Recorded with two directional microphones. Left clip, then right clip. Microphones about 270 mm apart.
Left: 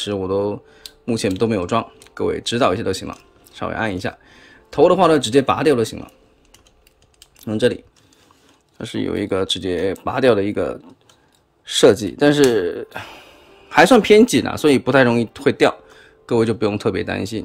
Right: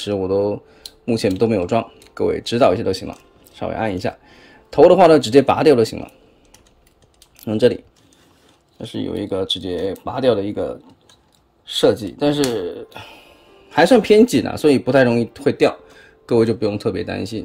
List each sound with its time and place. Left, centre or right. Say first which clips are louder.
0.0 s speech: right 2 dB; centre
7.3 s speech: right 3 dB; centre
8.7 s speech: left 2 dB; centre